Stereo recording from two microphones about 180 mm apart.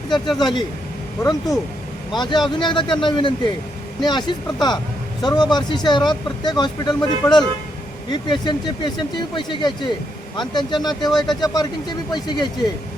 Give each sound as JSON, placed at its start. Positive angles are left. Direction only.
{"t": 0.3, "sound": "speech", "side_deg": 25}